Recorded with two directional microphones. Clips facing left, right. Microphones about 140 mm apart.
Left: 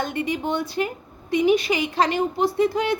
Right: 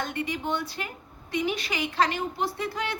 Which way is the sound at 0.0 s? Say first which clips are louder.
Left 5 dB; 15° left (ahead or behind).